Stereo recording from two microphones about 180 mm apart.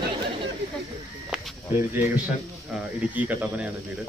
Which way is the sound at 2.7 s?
Centre (ahead or behind).